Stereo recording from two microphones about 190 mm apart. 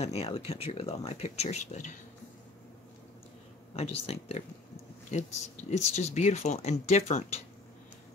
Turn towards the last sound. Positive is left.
turn(degrees=35)  # may be behind; listen again after turning